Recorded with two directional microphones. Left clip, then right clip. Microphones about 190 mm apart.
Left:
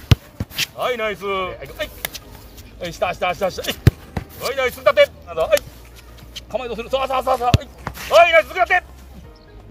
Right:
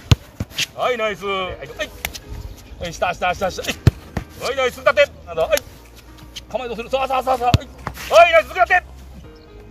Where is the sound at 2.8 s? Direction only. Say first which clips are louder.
Right 1 dB; 35° left (ahead or behind).